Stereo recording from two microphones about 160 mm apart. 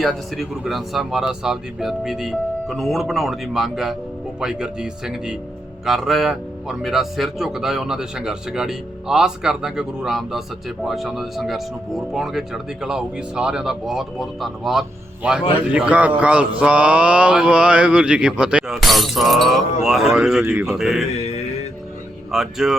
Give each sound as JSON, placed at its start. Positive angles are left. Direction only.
{"t": 0.0, "sound": "a man's voice", "side_deg": 0}
{"t": 21.2, "sound": "music", "side_deg": 45}
{"t": 22.3, "sound": "music", "side_deg": 0}